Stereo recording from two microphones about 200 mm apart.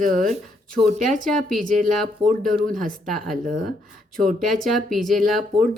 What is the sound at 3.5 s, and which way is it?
Speech, 40° right (ahead or behind).